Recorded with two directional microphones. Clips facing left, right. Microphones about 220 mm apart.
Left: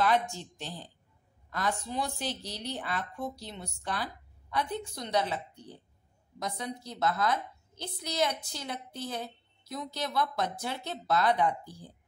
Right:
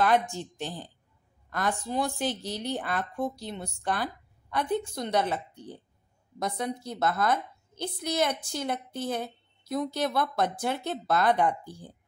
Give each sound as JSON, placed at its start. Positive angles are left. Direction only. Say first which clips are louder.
{"t": 0.0, "sound": "a woman's voice", "louder": "right 3 dB", "side_deg": -50}
{"t": 6.4, "sound": "a woman's voice", "louder": "right 5 dB", "side_deg": -55}